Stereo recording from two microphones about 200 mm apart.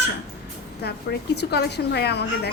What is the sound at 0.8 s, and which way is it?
A woman's voice, 55° left (ahead or behind).